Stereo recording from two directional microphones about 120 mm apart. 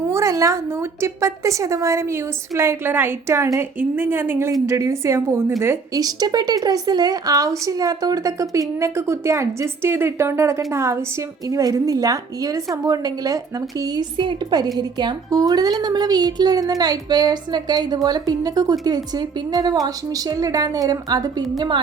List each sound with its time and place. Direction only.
0.1 s a woman's voice: 25° right (ahead or behind)